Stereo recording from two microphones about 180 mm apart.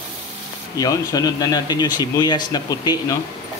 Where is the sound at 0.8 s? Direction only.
20° left (ahead or behind).